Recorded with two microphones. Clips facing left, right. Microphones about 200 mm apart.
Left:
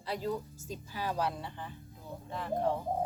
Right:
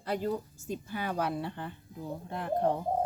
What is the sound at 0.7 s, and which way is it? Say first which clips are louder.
Speech: right 3 dB; 55° right (ahead or behind).